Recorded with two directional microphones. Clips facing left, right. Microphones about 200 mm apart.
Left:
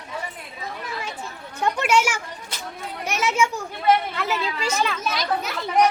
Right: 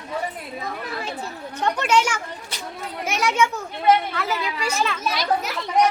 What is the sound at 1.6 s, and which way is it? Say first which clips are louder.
Speech: even; 10° left (ahead or behind).